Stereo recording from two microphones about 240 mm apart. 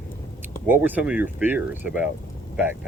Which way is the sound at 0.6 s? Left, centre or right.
Centre.